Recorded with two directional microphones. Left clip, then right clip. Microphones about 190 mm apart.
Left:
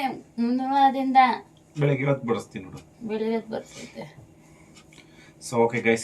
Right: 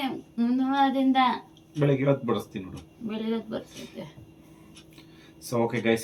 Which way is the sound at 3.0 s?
Centre (ahead or behind).